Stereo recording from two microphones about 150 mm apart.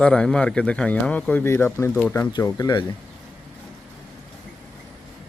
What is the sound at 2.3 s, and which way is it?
Speech, 25° left (ahead or behind).